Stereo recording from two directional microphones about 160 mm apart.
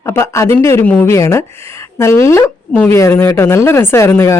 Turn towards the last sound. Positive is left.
turn(degrees=15)  # may be behind; listen again after turning